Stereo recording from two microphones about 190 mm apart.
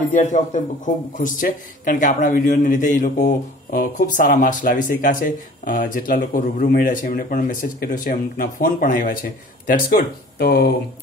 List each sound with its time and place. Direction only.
0.1 s a man's voice: 40° left (ahead or behind)